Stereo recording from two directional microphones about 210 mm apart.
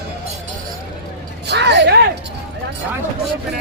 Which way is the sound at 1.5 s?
55° right (ahead or behind).